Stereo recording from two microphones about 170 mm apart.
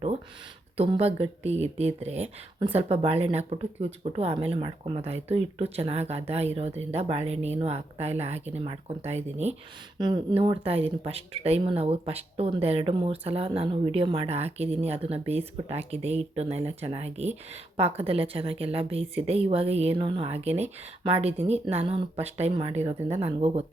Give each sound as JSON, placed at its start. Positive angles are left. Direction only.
{"t": 0.8, "sound": "speech", "side_deg": -35}
{"t": 10.0, "sound": "speech", "side_deg": -25}